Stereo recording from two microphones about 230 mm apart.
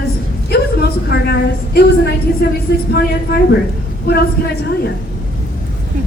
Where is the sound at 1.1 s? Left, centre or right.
Left.